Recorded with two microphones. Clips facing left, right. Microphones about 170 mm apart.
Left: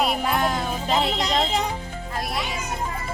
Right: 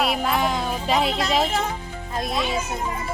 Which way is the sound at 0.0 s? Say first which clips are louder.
Even; centre (ahead or behind).